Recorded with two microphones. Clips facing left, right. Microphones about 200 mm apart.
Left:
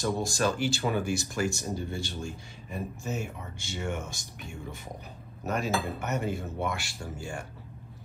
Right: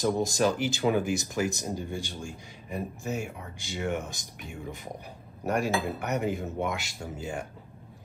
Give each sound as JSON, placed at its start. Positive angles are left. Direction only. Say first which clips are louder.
{"t": 0.0, "sound": "speech", "louder": "right 3 dB", "side_deg": -15}
{"t": 5.4, "sound": "cutlery", "louder": "right 3 dB", "side_deg": -15}
{"t": 6.0, "sound": "speech", "louder": "right 2 dB", "side_deg": -15}